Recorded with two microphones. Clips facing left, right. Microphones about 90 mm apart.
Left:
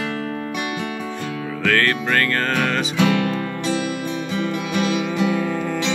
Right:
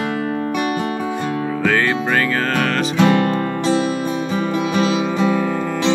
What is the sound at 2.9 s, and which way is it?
Music, 40° right (ahead or behind).